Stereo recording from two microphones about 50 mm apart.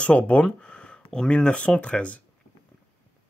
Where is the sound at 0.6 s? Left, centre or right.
Left.